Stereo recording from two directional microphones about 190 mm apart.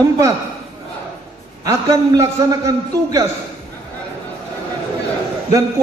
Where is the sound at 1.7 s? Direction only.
15° right (ahead or behind).